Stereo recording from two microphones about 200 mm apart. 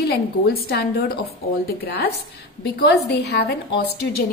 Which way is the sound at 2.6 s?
55° left (ahead or behind).